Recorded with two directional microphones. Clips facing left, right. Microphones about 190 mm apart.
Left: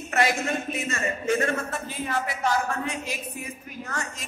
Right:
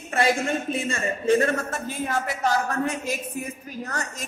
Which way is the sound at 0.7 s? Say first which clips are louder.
Right 2 dB; 30° right (ahead or behind).